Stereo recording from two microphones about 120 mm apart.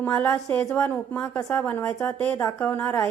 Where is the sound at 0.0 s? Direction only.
10° left (ahead or behind).